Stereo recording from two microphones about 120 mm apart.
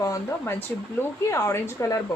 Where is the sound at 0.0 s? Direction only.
25° left (ahead or behind).